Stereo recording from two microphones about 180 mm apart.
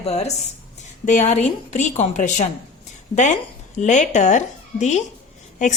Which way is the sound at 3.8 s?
40° left (ahead or behind).